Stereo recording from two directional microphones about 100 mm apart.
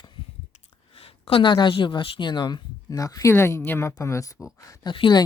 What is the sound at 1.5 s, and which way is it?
Speech, 55° left (ahead or behind).